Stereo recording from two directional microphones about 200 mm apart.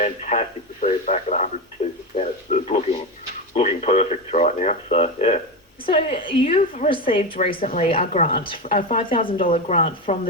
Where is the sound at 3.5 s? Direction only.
35° left (ahead or behind).